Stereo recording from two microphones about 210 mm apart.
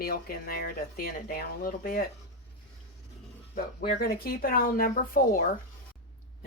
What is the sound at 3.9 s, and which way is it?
A woman's voice, 45° left (ahead or behind).